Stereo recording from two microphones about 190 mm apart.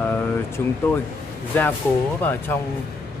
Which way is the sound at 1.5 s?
10° left (ahead or behind).